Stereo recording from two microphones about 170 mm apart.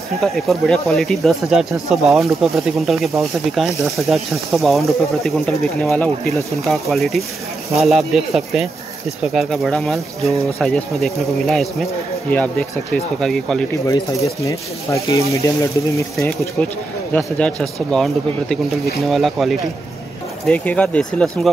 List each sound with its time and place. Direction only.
0.2 s speech: centre (ahead or behind)
13.8 s speech: 20° left (ahead or behind)
17.1 s speech: 5° left (ahead or behind)